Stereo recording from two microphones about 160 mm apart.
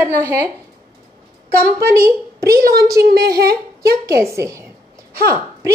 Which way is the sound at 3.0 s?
80° right.